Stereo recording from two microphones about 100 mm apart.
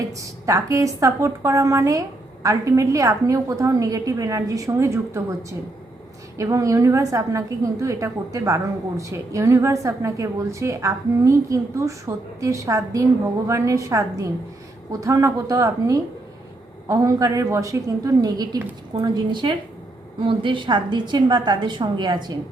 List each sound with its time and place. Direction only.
0.2 s a woman's voice: 35° right (ahead or behind)